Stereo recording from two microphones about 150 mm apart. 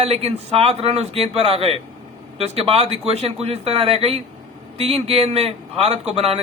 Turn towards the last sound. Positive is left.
turn(degrees=-40)  # may be behind; listen again after turning